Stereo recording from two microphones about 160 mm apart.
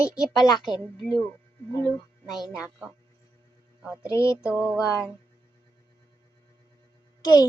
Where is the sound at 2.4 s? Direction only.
5° right (ahead or behind).